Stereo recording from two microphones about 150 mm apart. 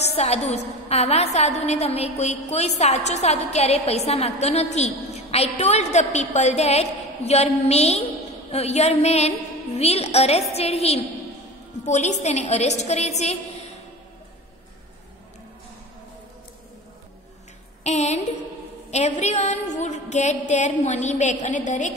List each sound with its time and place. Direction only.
0.0 s a woman's voice: 45° left (ahead or behind)
17.8 s a woman's voice: 50° left (ahead or behind)